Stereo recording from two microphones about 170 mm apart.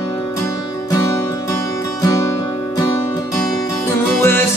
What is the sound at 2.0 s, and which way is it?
Music, 20° left (ahead or behind).